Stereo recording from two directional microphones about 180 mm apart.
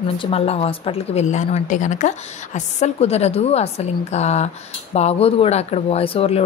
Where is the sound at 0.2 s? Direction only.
35° left (ahead or behind).